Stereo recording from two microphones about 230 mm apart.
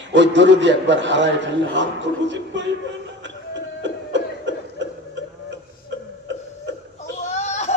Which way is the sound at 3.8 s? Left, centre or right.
Right.